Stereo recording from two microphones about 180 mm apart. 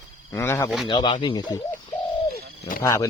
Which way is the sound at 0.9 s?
25° left (ahead or behind).